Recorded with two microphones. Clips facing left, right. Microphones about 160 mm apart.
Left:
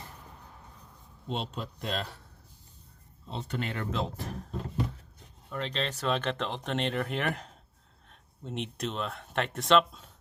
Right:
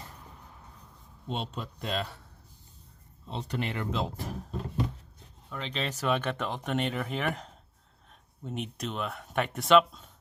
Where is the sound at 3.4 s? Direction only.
15° right (ahead or behind).